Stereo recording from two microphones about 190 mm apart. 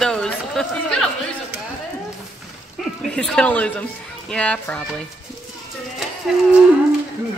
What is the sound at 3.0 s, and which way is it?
Speech, 5° left (ahead or behind).